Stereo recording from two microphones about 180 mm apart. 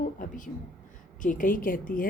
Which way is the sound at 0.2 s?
45° left (ahead or behind).